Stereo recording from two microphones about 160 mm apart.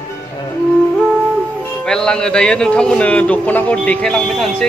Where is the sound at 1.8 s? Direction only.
5° left (ahead or behind).